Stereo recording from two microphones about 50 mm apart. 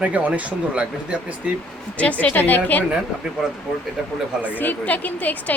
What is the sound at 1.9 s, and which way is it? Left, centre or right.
Speech, left.